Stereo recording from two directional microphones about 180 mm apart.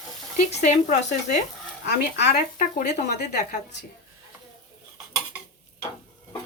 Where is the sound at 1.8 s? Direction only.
70° left (ahead or behind).